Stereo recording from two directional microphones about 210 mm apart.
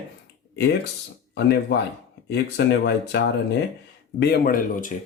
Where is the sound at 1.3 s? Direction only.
50° left (ahead or behind).